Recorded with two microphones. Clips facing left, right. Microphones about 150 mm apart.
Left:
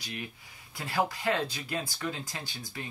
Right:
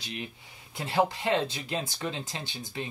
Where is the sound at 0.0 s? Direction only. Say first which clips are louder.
Right 2 dB; 25° right (ahead or behind).